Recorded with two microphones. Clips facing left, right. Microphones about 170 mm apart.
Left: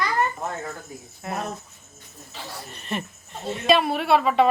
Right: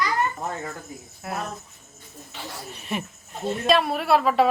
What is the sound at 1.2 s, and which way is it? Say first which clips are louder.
Speech: left 1 dB; centre (ahead or behind).